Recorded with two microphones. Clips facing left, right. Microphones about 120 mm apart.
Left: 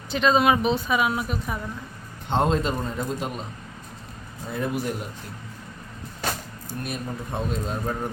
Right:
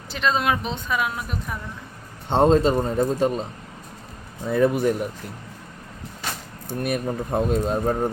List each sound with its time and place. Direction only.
0.1 s a woman's voice: centre (ahead or behind)
2.3 s a man's voice: 35° right (ahead or behind)
4.4 s speech: 60° right (ahead or behind)
6.7 s speech: 60° right (ahead or behind)
7.3 s a man's voice: 45° right (ahead or behind)